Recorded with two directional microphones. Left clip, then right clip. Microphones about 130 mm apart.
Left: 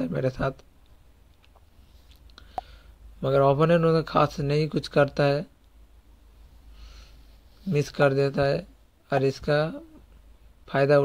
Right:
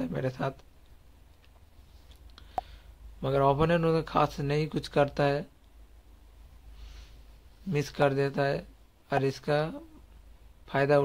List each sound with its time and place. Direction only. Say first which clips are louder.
0.0 s speech: left 5 dB; 25° left (ahead or behind)
2.6 s a man's voice: left 2 dB; 20° left (ahead or behind)
7.7 s speech: left 4 dB; 20° left (ahead or behind)